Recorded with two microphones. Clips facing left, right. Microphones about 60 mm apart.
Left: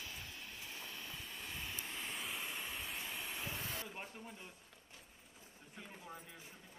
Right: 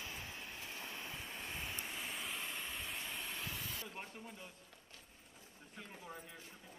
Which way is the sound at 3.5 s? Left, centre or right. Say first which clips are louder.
Left 2 dB; left.